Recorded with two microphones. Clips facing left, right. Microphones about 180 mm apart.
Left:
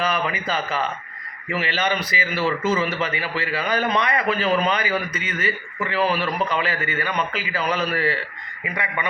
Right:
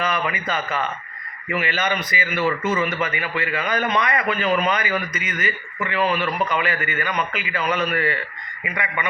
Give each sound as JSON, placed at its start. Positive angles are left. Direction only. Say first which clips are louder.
{"t": 0.0, "sound": "a man's voice", "louder": "even", "side_deg": 30}